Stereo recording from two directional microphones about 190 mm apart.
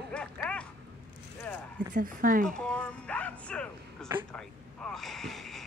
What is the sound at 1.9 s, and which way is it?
Speech, 45° right (ahead or behind).